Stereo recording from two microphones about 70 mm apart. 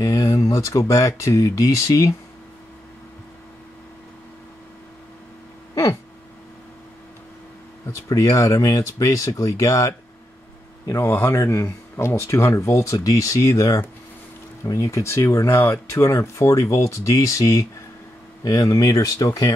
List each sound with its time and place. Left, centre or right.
0.0 s speech: left
8.1 s speech: left
10.9 s speech: left